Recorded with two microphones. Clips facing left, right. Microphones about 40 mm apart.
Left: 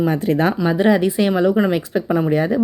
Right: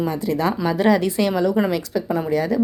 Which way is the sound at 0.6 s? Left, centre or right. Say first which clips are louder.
Left 1 dB; centre.